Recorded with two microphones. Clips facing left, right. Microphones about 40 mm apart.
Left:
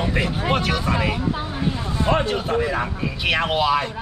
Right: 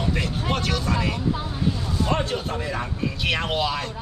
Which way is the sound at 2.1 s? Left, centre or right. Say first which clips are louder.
Left 7 dB; centre.